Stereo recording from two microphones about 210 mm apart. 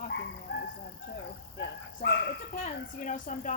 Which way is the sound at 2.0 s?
55° left (ahead or behind).